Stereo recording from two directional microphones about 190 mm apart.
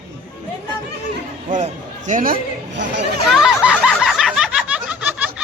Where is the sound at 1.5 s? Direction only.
40° right (ahead or behind).